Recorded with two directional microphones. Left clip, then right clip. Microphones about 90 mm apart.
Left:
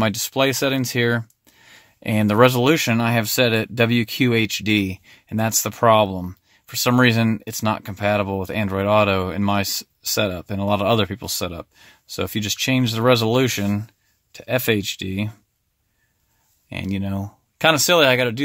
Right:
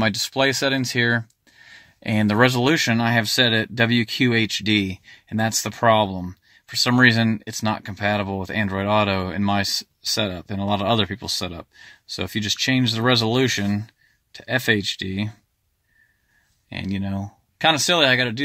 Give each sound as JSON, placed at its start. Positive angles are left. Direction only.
{"t": 0.0, "sound": "speech", "side_deg": 30}
{"t": 16.6, "sound": "speech", "side_deg": 30}